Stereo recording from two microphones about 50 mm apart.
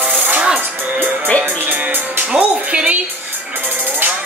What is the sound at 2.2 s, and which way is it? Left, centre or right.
Music, centre.